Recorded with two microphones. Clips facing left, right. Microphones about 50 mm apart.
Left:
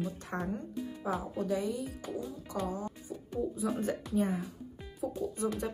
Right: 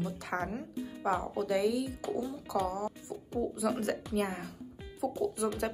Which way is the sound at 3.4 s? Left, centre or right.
Right.